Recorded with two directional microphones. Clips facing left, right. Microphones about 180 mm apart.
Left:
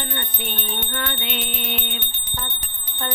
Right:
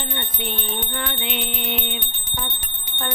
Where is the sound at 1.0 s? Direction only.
20° right (ahead or behind).